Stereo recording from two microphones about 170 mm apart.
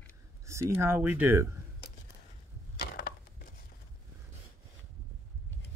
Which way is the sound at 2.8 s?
60° left (ahead or behind).